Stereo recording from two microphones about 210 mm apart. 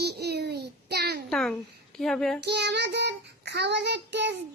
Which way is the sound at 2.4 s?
55° right (ahead or behind).